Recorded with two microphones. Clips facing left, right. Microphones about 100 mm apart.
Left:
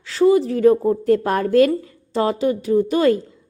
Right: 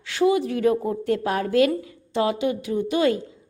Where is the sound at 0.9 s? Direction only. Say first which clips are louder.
Left 6 dB; 40° left (ahead or behind).